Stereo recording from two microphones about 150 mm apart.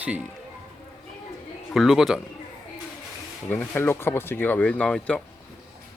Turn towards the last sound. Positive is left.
turn(degrees=10)  # may be behind; listen again after turning